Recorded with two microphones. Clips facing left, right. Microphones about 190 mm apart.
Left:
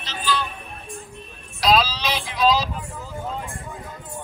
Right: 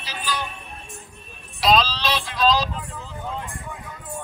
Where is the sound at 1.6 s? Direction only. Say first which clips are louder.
Even; 5° left (ahead or behind).